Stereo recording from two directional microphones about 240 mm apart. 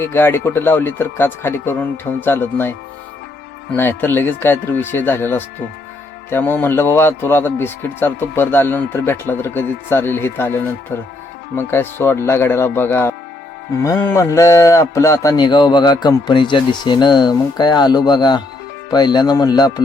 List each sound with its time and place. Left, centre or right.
0.0 s speech: centre
3.8 s speech: centre